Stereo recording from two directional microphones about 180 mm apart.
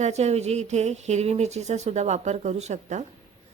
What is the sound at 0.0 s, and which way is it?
Speech, 40° right (ahead or behind).